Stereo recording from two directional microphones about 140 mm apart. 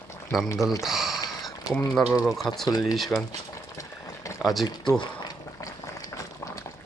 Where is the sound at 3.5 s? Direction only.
25° left (ahead or behind).